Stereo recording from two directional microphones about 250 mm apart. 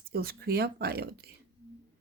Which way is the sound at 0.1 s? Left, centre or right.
Right.